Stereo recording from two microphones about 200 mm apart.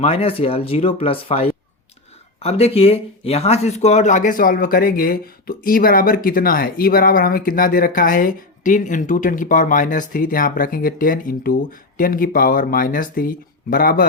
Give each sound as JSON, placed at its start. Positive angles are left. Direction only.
{"t": 0.0, "sound": "speech", "side_deg": 30}